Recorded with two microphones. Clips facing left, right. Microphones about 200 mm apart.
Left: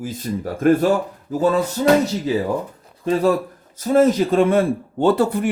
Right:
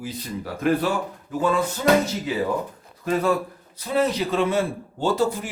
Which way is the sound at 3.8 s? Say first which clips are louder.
Left 7 dB; 45° left (ahead or behind).